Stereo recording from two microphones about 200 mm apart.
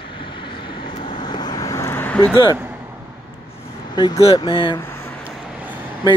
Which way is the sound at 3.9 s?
20° left (ahead or behind).